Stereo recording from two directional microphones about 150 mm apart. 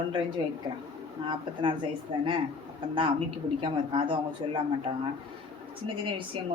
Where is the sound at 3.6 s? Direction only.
35° right (ahead or behind).